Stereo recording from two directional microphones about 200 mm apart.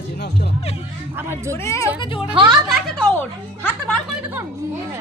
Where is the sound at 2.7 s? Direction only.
Centre (ahead or behind).